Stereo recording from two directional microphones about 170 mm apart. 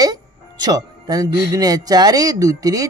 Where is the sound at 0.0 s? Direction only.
25° right (ahead or behind).